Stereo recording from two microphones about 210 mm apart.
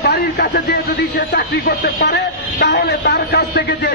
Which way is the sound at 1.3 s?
50° left (ahead or behind).